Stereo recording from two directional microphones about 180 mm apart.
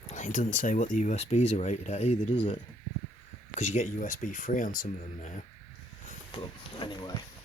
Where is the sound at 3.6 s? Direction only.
40° left (ahead or behind).